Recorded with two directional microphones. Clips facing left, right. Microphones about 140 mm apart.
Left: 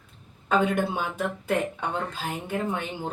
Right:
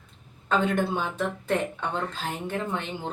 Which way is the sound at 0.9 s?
10° left (ahead or behind).